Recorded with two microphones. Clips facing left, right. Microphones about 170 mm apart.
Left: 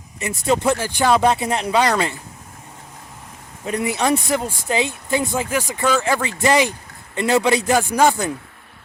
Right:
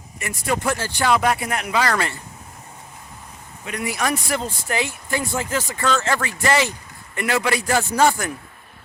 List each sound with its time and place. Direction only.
0.2 s speech: 20° left (ahead or behind)
1.9 s speech: 15° left (ahead or behind)
3.7 s speech: 25° left (ahead or behind)